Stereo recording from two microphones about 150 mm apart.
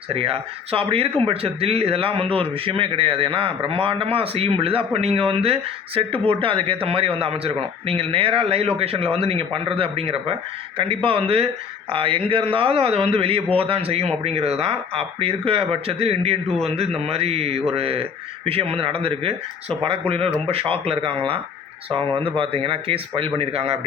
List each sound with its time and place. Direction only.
0.1 s speech: 40° right (ahead or behind)